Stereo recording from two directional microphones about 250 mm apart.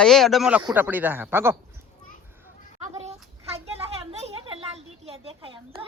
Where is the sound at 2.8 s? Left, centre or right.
Right.